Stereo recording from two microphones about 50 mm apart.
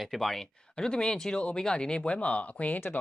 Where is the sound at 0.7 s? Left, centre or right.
Centre.